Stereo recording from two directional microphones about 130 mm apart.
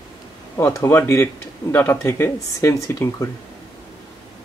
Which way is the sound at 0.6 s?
20° left (ahead or behind).